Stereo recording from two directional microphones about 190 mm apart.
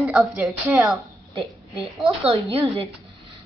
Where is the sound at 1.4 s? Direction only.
30° right (ahead or behind).